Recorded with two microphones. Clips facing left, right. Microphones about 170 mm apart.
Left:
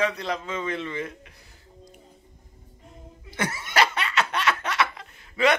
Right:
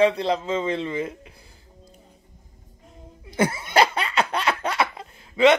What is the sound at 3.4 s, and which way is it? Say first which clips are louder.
Laughter: right 5 dB; 30° right (ahead or behind).